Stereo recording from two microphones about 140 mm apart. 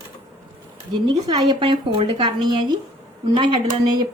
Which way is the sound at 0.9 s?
35° right (ahead or behind).